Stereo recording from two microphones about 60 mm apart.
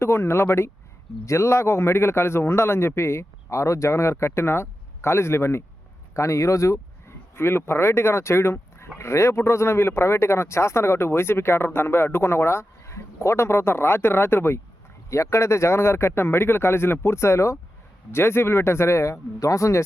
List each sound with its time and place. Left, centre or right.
0.0 s speech: left
6.1 s speech: left
7.3 s speech: left
15.1 s speech: left